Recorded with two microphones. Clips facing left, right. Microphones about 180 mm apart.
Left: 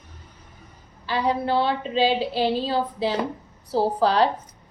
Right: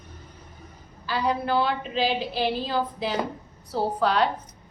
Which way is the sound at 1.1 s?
25° left (ahead or behind).